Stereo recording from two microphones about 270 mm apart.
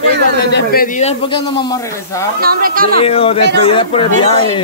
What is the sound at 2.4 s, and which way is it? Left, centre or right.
Speech, right.